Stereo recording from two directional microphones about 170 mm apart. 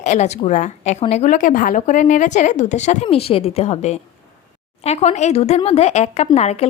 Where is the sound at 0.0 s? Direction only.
40° left (ahead or behind).